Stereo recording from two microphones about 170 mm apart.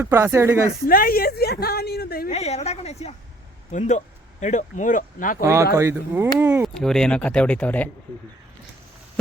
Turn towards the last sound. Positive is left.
turn(degrees=10)  # may be behind; listen again after turning